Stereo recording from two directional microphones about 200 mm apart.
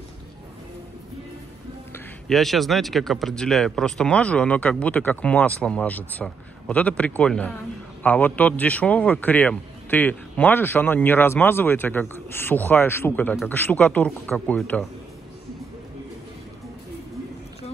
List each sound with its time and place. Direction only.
2.2 s a man's voice: centre (ahead or behind)